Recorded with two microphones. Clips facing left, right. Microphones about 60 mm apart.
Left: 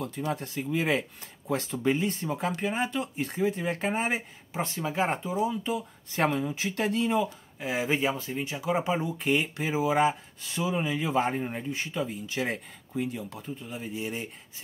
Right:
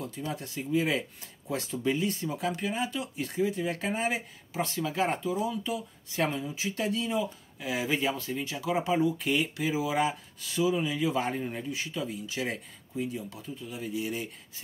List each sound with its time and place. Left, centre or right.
0.0 s speech: left
12.9 s speech: left
13.3 s speech: left